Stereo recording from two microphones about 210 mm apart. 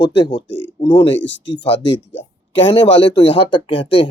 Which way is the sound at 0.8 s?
25° left (ahead or behind).